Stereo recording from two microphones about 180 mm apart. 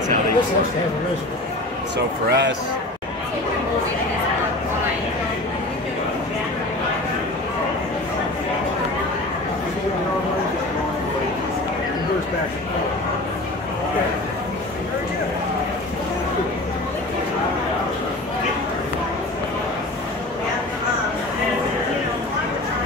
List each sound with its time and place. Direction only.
2.0 s speech: 70° right (ahead or behind)